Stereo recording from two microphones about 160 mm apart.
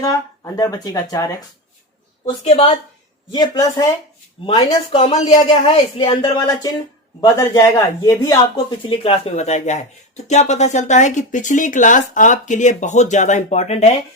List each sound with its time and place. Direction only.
0.0 s speech: 25° left (ahead or behind)
2.4 s a woman's voice: 45° left (ahead or behind)
3.3 s speech: 25° left (ahead or behind)
4.4 s speech: 35° left (ahead or behind)
8.5 s a woman's voice: 35° left (ahead or behind)